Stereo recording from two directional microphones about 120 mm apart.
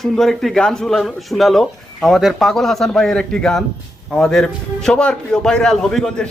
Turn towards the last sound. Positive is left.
turn(degrees=5)  # may be behind; listen again after turning